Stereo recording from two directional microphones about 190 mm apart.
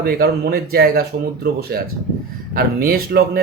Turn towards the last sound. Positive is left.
turn(degrees=-55)  # may be behind; listen again after turning